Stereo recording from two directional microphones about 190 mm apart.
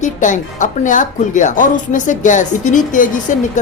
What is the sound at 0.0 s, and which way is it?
A woman's voice, 40° left (ahead or behind).